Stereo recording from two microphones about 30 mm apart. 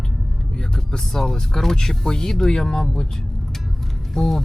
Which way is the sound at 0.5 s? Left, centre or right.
Left.